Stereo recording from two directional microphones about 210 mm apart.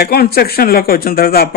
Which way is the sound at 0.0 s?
50° left (ahead or behind).